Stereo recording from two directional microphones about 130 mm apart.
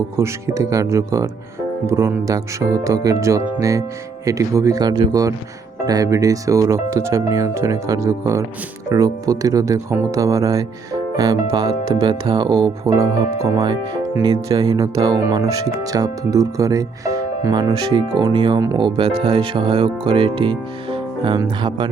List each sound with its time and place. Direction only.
0.2 s speech: 20° right (ahead or behind)
12.8 s speech: 25° right (ahead or behind)